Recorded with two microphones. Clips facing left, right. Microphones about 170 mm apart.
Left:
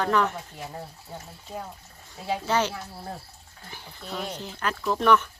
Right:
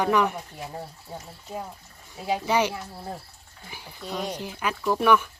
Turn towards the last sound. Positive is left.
turn(degrees=-10)  # may be behind; listen again after turning